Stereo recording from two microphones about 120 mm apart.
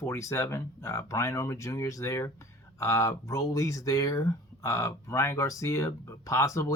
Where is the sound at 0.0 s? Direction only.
25° left (ahead or behind).